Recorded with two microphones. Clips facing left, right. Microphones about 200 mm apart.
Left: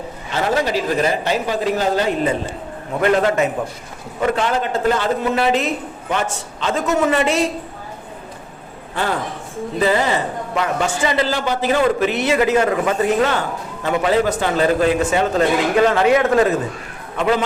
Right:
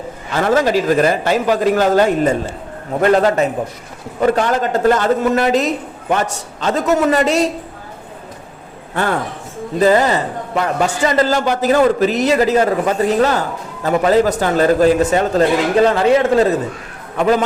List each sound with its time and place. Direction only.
0.3 s a man's voice: 50° right (ahead or behind)
9.8 s a man's voice: 40° right (ahead or behind)
17.2 s a man's voice: 40° right (ahead or behind)